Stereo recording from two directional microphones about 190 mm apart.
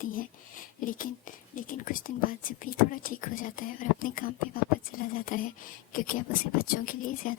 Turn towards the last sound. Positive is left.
turn(degrees=45)  # may be behind; listen again after turning